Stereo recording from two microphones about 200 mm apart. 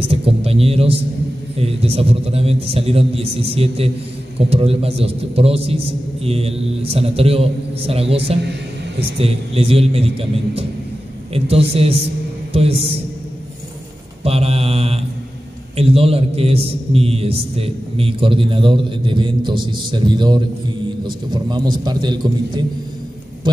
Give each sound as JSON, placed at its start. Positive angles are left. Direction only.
{"t": 0.0, "sound": "a sound", "side_deg": -30}
{"t": 1.6, "sound": "a man's voice", "side_deg": -30}
{"t": 14.2, "sound": "mantra", "side_deg": -30}
{"t": 15.7, "sound": "a man's voice", "side_deg": -30}